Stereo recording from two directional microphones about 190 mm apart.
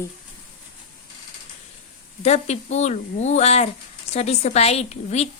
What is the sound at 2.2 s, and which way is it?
A woman's voice, 35° left (ahead or behind).